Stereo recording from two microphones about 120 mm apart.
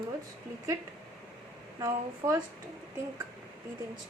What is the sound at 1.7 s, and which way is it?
Speech, 30° right (ahead or behind).